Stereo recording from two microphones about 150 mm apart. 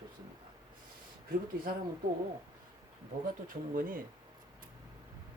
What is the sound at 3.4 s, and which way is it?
Speech, 65° right (ahead or behind).